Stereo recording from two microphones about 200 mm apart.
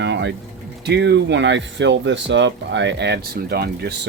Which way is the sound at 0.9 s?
60° right (ahead or behind).